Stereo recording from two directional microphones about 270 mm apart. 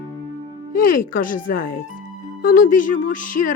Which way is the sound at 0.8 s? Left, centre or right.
Left.